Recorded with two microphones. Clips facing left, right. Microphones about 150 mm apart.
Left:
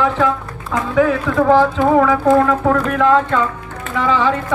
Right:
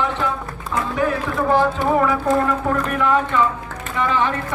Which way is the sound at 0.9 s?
90° left.